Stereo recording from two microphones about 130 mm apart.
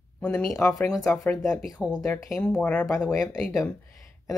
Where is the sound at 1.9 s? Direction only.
25° left (ahead or behind).